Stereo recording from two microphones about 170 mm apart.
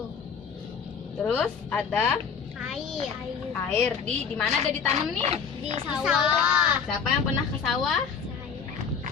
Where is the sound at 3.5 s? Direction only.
10° left (ahead or behind).